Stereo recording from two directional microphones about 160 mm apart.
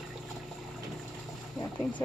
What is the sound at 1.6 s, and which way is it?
Vehicle, 10° left (ahead or behind).